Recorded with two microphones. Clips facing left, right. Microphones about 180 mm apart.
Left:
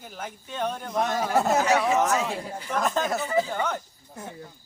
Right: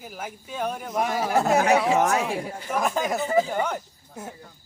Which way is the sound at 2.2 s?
10° right (ahead or behind).